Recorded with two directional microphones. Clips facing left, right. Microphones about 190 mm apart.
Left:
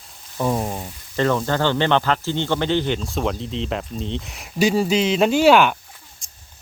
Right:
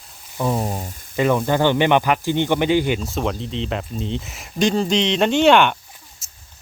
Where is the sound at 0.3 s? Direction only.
Centre (ahead or behind).